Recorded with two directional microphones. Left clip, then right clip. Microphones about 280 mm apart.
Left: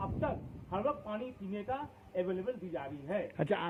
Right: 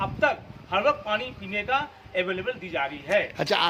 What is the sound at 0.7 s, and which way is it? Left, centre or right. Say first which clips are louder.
A man's voice: right 12 dB; right.